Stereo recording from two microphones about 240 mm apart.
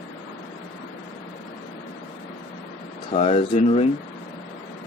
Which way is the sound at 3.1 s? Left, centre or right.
Left.